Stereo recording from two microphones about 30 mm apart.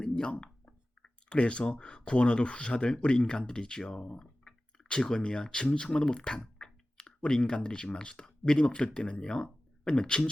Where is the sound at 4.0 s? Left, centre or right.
Left.